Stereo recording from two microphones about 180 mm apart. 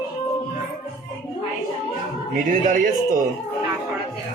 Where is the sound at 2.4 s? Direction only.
45° right (ahead or behind).